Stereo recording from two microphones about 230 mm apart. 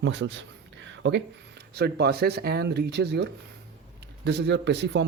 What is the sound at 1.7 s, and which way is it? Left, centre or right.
A man's voice, right.